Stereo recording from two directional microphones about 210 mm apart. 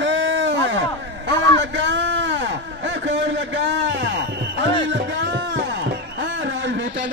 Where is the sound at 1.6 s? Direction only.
60° right (ahead or behind).